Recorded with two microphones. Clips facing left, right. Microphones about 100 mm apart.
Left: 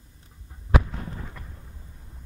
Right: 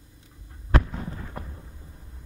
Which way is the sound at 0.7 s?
5° left (ahead or behind).